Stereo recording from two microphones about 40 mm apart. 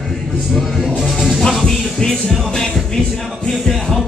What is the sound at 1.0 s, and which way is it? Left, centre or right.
Music, centre.